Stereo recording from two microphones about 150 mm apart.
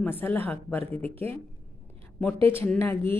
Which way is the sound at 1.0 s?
40° right (ahead or behind).